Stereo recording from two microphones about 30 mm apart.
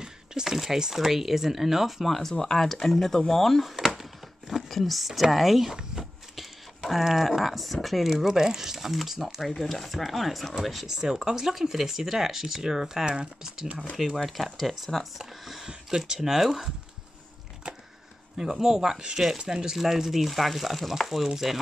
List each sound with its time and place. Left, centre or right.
0.0 s a sound: right
0.7 s speech: centre
2.0 s speech: centre
2.3 s speech: centre
3.6 s speech: centre
6.3 s a sound: centre
7.1 s speech: centre
9.4 s speech: centre
10.9 s speech: centre
13.9 s speech: centre
17.6 s a sound: right
18.4 s speech: centre
19.8 s speech: centre